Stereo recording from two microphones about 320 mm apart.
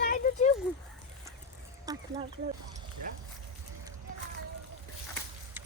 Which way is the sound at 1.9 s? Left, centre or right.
Centre.